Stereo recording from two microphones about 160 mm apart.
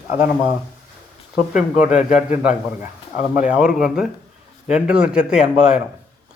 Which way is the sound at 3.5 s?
5° right (ahead or behind).